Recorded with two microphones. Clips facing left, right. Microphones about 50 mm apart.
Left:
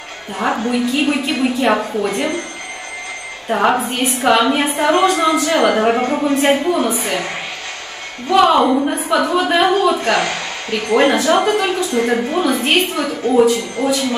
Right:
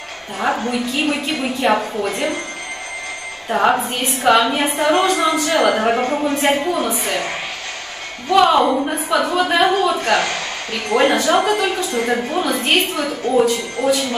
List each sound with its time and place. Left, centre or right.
0.4 s a woman's voice: centre
3.4 s a woman's voice: centre
8.3 s a woman's voice: centre